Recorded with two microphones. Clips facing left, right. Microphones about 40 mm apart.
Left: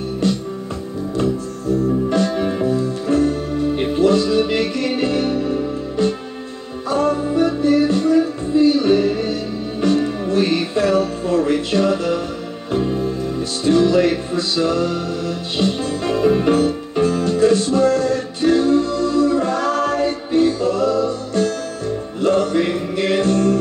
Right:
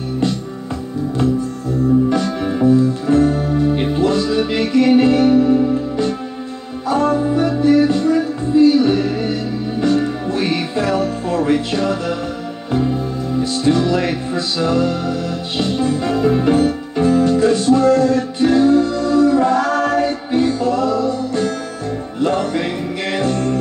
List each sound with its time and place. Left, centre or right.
2.6 s music: right
6.9 s music: right
9.8 s music: right
13.4 s music: right
17.0 s music: right